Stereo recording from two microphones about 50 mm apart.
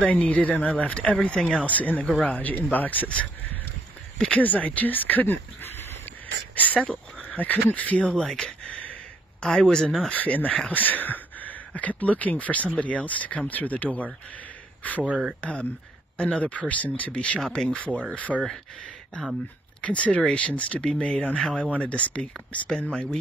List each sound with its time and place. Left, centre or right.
0.0 s speech: left
1.6 s speech: left
4.3 s speech: left
6.5 s speech: left
8.1 s speech: centre
10.1 s speech: left
19.8 s speech: left
21.0 s speech: centre